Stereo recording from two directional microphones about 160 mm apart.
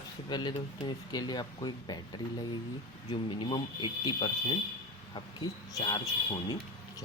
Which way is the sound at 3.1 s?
30° left (ahead or behind).